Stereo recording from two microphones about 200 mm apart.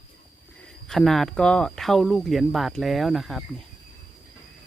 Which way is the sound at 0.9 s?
Centre (ahead or behind).